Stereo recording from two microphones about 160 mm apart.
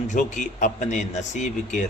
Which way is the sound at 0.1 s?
50° left (ahead or behind).